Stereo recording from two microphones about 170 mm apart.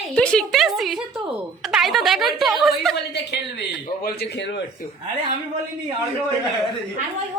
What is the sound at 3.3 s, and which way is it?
A man's voice, 75° left (ahead or behind).